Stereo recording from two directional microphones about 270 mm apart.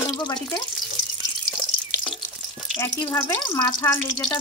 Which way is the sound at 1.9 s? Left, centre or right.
Centre.